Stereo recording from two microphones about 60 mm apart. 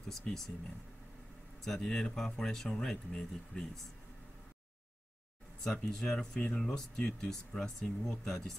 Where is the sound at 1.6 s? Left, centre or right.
Centre.